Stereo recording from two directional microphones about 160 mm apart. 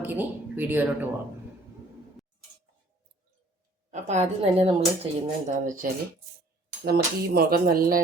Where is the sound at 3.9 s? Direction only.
45° right (ahead or behind).